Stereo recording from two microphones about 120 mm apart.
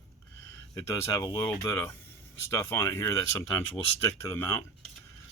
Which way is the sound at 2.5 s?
20° left (ahead or behind).